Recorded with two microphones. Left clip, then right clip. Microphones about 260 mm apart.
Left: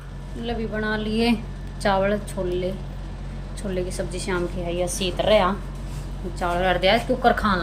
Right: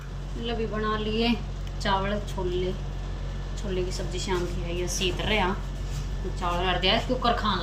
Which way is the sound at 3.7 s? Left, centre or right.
Centre.